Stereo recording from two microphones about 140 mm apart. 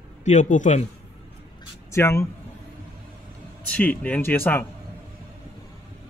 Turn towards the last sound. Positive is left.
turn(degrees=15)  # may be behind; listen again after turning